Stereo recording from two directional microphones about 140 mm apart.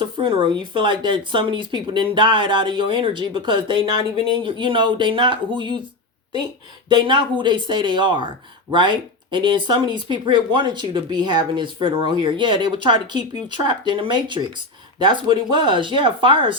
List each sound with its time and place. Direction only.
0.0 s speech: 40° right (ahead or behind)
6.8 s speech: 35° right (ahead or behind)